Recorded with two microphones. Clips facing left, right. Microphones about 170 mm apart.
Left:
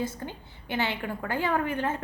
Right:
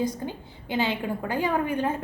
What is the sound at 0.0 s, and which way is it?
A woman's voice, 15° right (ahead or behind).